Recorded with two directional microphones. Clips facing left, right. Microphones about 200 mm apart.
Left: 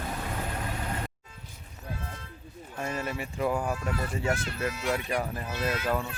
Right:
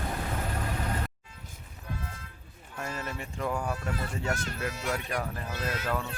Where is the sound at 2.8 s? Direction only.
10° left (ahead or behind).